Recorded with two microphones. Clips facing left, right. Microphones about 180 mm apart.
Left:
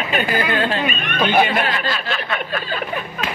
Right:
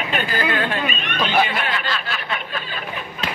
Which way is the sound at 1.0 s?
50° left (ahead or behind).